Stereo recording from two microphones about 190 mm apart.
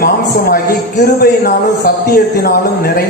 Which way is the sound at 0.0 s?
50° left (ahead or behind).